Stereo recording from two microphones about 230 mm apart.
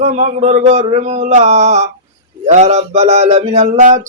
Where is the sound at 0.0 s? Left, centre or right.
Right.